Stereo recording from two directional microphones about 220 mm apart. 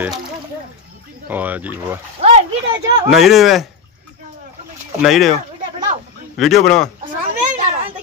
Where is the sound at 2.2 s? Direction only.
30° right (ahead or behind).